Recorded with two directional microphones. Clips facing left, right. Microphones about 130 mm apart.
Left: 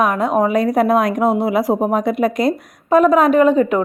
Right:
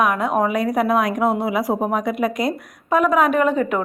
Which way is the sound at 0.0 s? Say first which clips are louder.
Left 3 dB; 25° left (ahead or behind).